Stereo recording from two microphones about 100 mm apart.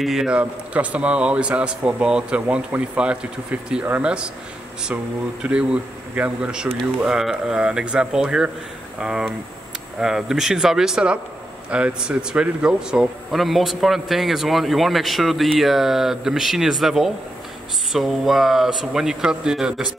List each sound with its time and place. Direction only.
0.0 s a man's voice: 5° right (ahead or behind)
5.4 s a man's voice: 10° right (ahead or behind)
9.9 s speech: 5° right (ahead or behind)